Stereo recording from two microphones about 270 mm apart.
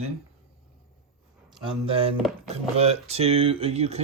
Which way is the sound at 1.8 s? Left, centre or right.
Centre.